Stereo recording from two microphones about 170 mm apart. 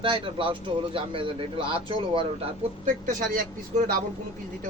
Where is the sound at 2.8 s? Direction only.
50° right (ahead or behind).